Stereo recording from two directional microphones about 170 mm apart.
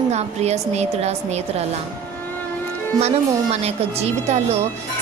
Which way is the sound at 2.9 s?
40° right (ahead or behind).